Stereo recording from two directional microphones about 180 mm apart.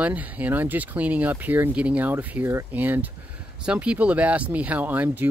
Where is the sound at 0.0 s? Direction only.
10° right (ahead or behind).